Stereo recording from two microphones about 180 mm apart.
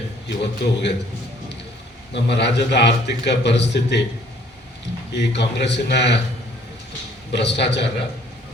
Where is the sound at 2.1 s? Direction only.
70° left (ahead or behind).